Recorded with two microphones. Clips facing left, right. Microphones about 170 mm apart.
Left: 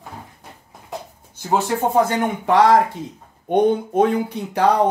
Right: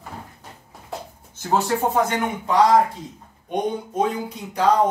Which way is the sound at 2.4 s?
65° left (ahead or behind).